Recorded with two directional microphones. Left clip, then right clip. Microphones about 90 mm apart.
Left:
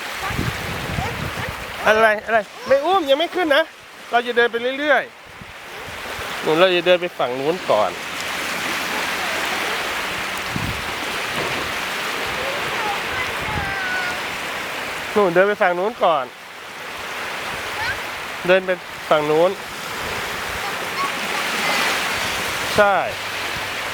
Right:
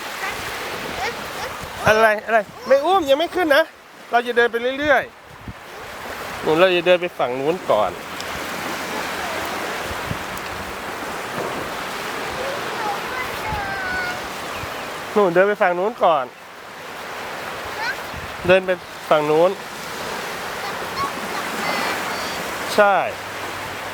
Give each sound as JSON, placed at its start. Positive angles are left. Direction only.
{"t": 1.8, "sound": "speech", "side_deg": -10}
{"t": 6.4, "sound": "speech", "side_deg": 0}
{"t": 11.3, "sound": "a sound", "side_deg": 40}
{"t": 15.1, "sound": "speech", "side_deg": 5}
{"t": 18.4, "sound": "speech", "side_deg": -5}
{"t": 21.7, "sound": "a sound", "side_deg": 40}
{"t": 22.7, "sound": "speech", "side_deg": -5}